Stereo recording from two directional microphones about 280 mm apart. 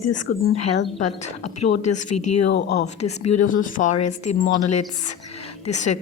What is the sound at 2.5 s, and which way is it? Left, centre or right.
Speech, left.